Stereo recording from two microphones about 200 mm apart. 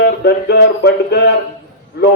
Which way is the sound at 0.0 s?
55° left (ahead or behind).